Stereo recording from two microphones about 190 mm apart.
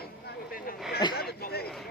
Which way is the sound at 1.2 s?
55° left (ahead or behind).